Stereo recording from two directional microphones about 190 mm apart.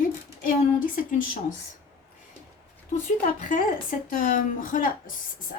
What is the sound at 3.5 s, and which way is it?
Speech, 45° left (ahead or behind).